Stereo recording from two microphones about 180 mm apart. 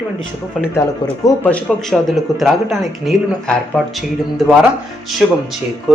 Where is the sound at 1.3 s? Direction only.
10° left (ahead or behind).